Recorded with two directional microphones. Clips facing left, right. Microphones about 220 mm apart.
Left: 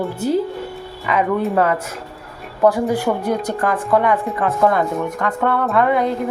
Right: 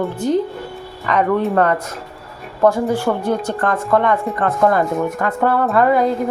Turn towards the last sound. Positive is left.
turn(degrees=0)  # may be behind; listen again after turning